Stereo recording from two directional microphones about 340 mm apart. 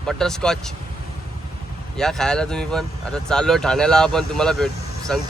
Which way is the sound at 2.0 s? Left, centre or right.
Centre.